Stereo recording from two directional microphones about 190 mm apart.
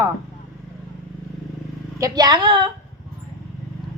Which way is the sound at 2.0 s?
20° right (ahead or behind).